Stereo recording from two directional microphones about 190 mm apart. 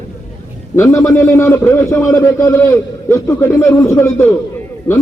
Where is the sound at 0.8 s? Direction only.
15° left (ahead or behind).